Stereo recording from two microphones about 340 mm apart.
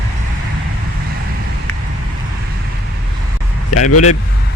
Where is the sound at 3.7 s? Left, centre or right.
Left.